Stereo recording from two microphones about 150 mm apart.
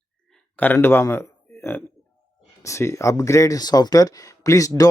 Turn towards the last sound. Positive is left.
turn(degrees=20)  # may be behind; listen again after turning